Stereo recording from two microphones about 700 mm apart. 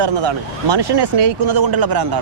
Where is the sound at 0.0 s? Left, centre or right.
Right.